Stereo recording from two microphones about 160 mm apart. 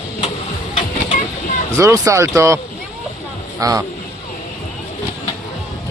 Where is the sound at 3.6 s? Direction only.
20° right (ahead or behind).